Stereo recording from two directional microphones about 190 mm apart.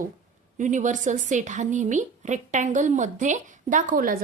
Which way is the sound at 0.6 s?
40° right (ahead or behind).